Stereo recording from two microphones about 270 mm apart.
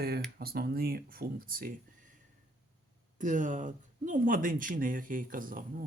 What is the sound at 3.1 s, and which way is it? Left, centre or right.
Speech, right.